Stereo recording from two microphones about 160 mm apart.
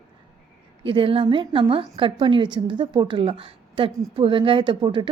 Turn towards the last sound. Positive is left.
turn(degrees=-30)  # may be behind; listen again after turning